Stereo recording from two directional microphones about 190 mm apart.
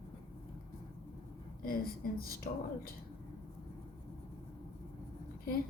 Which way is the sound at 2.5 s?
50° left (ahead or behind).